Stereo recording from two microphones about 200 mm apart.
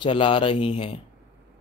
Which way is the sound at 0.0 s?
25° left (ahead or behind).